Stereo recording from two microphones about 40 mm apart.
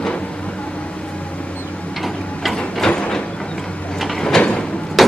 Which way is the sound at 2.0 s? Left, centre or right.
Centre.